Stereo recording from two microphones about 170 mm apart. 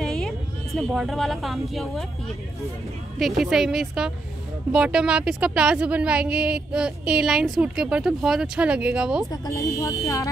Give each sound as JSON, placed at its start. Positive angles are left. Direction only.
{"t": 0.0, "sound": "vehicle", "side_deg": 0}
{"t": 0.7, "sound": "speech", "side_deg": 0}
{"t": 3.2, "sound": "speech", "side_deg": 0}
{"t": 9.3, "sound": "speech", "side_deg": 20}